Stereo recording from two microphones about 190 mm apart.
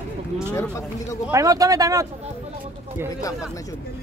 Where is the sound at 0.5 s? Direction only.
15° left (ahead or behind).